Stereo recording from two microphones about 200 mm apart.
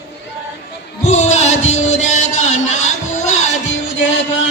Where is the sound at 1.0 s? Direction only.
35° left (ahead or behind).